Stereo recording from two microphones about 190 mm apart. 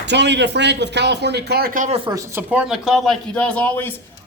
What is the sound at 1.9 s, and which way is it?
Speech, 20° right (ahead or behind).